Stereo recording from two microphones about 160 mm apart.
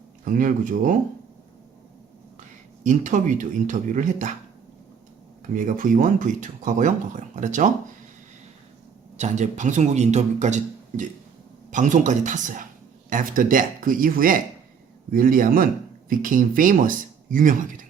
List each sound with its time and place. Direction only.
0.3 s speech: 55° right (ahead or behind)
2.8 s a man's voice: 50° right (ahead or behind)
5.5 s a man's voice: 55° right (ahead or behind)
9.1 s a man's voice: 45° right (ahead or behind)